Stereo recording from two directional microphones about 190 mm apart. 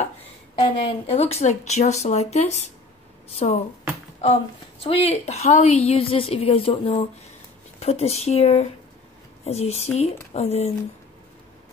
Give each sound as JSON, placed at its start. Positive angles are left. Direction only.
{"t": 0.6, "sound": "a woman's voice", "side_deg": 25}